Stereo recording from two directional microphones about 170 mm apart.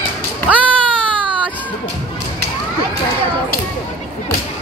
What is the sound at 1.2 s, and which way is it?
Baby cry, 30° right (ahead or behind).